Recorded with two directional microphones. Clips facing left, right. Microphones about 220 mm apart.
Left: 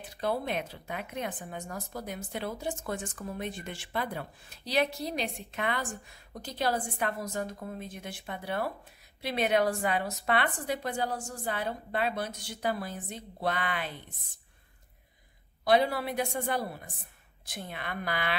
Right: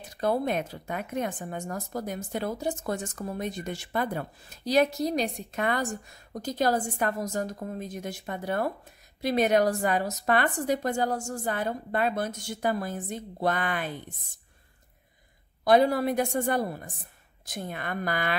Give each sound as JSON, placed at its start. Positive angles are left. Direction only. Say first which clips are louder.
{"t": 0.0, "sound": "a woman's voice", "louder": "right 5 dB", "side_deg": -45}
{"t": 15.6, "sound": "a woman's voice", "louder": "right 5 dB", "side_deg": -45}